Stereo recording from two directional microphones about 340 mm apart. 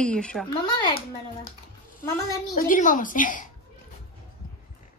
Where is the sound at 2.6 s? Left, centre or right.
Left.